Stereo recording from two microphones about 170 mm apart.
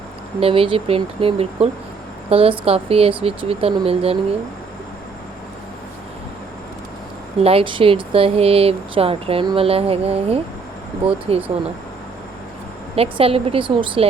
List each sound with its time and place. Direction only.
0.3 s speech: 35° right (ahead or behind)
7.4 s speech: 30° right (ahead or behind)
13.0 s speech: 35° right (ahead or behind)